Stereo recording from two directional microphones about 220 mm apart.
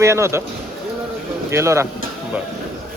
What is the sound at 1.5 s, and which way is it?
Speech, 10° right (ahead or behind).